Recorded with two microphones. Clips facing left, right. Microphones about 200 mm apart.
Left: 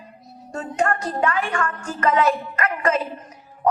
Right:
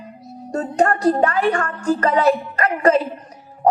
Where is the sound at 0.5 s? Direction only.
35° right (ahead or behind).